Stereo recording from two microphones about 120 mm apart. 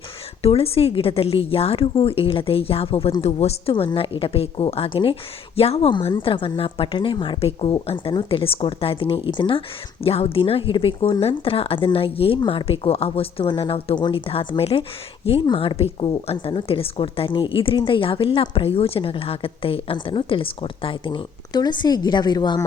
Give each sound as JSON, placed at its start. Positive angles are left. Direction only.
{"t": 0.4, "sound": "a woman's voice", "side_deg": 55}
{"t": 3.7, "sound": "a woman's voice", "side_deg": 45}